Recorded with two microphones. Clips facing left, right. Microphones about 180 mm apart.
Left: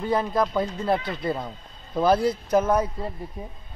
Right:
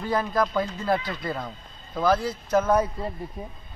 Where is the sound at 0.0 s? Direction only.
25° left (ahead or behind).